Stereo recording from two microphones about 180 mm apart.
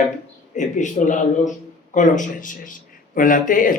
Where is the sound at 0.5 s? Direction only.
45° left (ahead or behind).